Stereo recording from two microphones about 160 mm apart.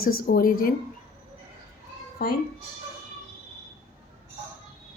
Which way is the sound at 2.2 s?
70° left (ahead or behind).